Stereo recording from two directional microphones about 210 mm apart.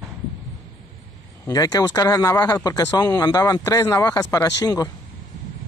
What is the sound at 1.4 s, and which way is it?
Speech, 15° left (ahead or behind).